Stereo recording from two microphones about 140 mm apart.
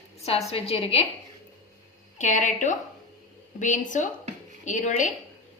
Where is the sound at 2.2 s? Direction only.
60° left (ahead or behind).